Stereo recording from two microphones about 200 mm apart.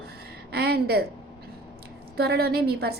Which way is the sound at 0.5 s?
50° right (ahead or behind).